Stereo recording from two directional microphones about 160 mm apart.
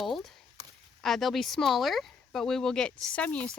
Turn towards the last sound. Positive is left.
turn(degrees=5)  # may be behind; listen again after turning